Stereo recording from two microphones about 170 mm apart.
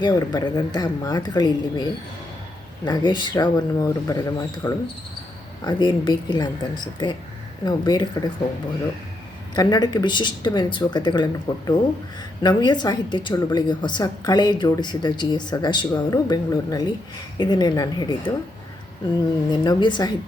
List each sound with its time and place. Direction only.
0.0 s a woman's voice: 25° left (ahead or behind)
9.6 s a woman's voice: 25° left (ahead or behind)
19.5 s a woman's voice: 25° left (ahead or behind)